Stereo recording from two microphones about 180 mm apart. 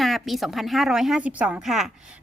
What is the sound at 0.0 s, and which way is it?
Speech, centre (ahead or behind).